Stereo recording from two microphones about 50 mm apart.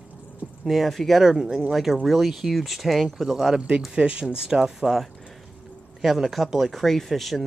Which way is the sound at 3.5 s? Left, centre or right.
Centre.